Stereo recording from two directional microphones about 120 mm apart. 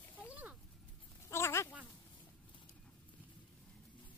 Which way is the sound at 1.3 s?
20° left (ahead or behind).